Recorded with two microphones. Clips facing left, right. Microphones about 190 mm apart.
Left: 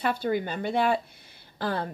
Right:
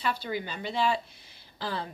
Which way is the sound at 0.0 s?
50° left (ahead or behind).